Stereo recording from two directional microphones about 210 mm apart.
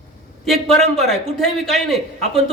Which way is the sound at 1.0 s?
Centre (ahead or behind).